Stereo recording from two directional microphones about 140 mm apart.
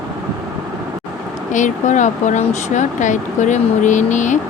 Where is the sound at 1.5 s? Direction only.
60° left (ahead or behind).